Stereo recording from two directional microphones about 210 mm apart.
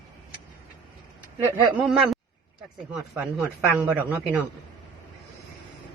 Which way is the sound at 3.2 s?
10° right (ahead or behind).